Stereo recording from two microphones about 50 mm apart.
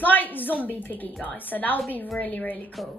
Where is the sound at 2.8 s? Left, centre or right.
Centre.